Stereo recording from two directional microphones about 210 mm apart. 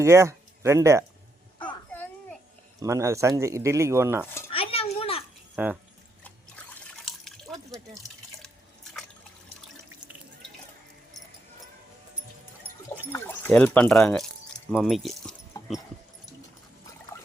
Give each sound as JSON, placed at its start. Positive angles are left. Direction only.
{"t": 0.0, "sound": "speech", "side_deg": -15}
{"t": 1.9, "sound": "babbling", "side_deg": 10}
{"t": 2.8, "sound": "speech", "side_deg": -15}
{"t": 4.5, "sound": "a sound", "side_deg": 25}
{"t": 5.6, "sound": "speech", "side_deg": -5}
{"t": 7.0, "sound": "water", "side_deg": 0}
{"t": 13.1, "sound": "speech", "side_deg": 10}